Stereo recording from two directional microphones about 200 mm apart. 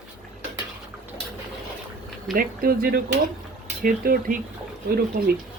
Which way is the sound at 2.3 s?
45° right (ahead or behind).